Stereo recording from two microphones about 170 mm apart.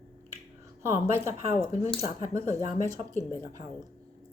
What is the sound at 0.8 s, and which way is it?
A woman's voice, 15° right (ahead or behind).